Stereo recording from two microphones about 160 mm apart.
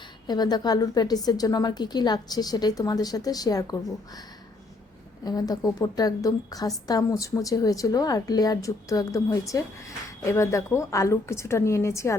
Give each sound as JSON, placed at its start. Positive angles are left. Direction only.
{"t": 0.3, "sound": "a woman's voice", "side_deg": 25}
{"t": 5.2, "sound": "a woman's voice", "side_deg": 25}